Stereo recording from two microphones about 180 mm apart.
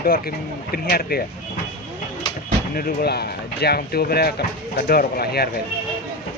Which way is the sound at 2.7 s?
60° left (ahead or behind).